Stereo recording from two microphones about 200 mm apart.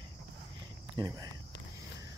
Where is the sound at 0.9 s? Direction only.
20° right (ahead or behind).